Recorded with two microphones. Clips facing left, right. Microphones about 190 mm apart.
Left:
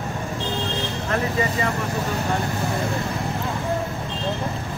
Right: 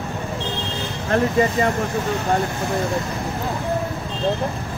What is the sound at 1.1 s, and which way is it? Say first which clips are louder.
Speech: right 6 dB; 35° right (ahead or behind).